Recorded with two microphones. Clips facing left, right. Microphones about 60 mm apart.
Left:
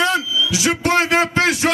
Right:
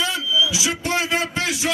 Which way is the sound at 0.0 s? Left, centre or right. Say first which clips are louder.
Left 3 dB; left.